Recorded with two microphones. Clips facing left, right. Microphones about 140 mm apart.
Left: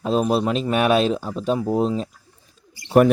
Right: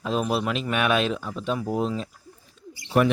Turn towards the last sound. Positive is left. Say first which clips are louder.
# left 6 dB
turn(degrees=45)  # may be behind; listen again after turning